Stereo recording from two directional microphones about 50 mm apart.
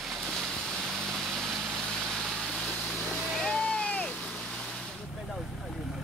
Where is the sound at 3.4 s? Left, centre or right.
Left.